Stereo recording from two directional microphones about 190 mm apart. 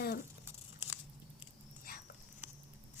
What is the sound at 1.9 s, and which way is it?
Dog, 50° left (ahead or behind).